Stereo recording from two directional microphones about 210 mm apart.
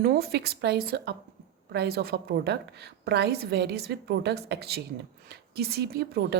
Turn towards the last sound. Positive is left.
turn(degrees=-50)  # may be behind; listen again after turning